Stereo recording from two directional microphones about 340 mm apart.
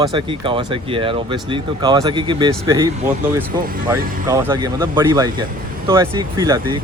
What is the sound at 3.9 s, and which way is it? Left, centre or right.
Speech, centre.